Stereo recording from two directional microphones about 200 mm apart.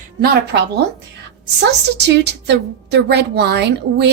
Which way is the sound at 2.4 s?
60° right (ahead or behind).